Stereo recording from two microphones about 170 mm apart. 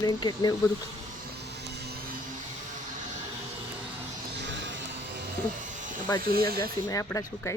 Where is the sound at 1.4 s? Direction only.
80° right.